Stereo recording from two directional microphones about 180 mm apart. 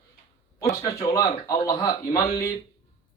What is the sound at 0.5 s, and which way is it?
Speech, 15° left (ahead or behind).